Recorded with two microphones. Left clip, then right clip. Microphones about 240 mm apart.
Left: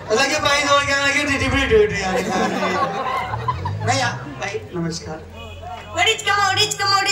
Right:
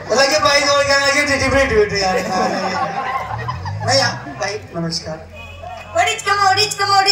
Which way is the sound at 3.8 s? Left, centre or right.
Right.